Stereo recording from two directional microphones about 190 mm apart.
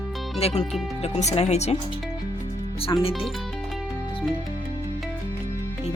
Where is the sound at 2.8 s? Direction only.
30° left (ahead or behind).